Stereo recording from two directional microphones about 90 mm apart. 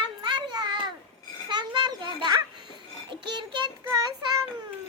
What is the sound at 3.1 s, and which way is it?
Child singing, 60° right (ahead or behind).